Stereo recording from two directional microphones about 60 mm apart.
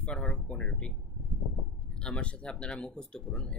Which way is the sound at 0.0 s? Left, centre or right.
Centre.